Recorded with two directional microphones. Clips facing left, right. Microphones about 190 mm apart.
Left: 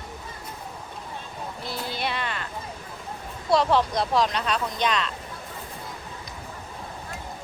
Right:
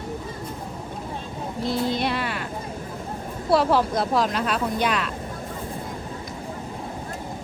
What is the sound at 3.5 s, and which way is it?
Speech, 5° right (ahead or behind).